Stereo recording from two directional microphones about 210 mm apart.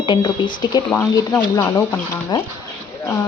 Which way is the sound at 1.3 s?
10° left (ahead or behind).